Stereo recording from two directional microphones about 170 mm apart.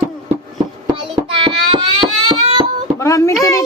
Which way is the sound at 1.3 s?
30° right (ahead or behind).